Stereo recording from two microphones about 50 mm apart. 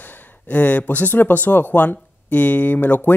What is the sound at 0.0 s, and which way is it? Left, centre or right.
Speech, left.